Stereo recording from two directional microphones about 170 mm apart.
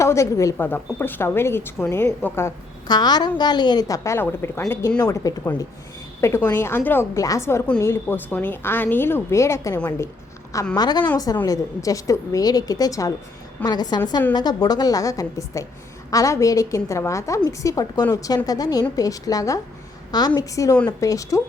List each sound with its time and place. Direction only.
0.0 s a woman's voice: 15° left (ahead or behind)